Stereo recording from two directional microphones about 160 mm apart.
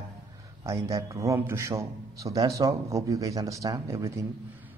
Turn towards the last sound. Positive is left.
turn(degrees=-15)  # may be behind; listen again after turning